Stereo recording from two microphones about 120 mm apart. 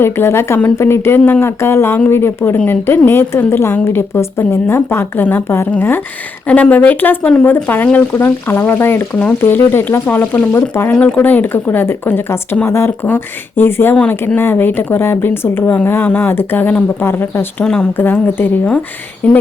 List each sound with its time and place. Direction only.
0.0 s a woman's voice: 20° left (ahead or behind)
17.6 s speech: 10° left (ahead or behind)